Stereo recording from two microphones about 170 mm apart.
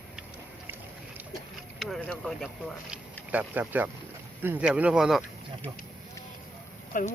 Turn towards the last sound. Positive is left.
turn(degrees=50)  # may be behind; listen again after turning